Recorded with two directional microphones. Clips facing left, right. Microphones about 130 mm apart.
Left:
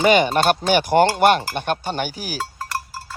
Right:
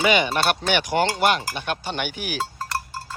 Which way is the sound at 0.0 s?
45° left (ahead or behind).